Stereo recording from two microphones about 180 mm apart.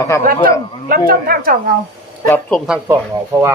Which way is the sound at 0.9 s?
55° right (ahead or behind).